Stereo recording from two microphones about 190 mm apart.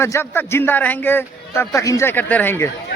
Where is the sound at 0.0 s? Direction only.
15° left (ahead or behind).